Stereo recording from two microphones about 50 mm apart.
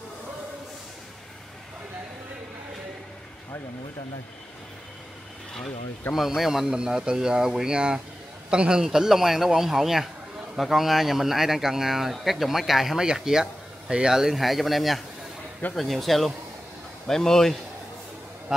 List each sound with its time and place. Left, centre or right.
6.1 s speech: centre
14.3 s speech: centre